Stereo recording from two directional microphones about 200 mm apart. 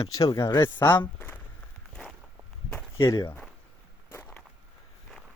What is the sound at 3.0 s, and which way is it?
Speech, 20° left (ahead or behind).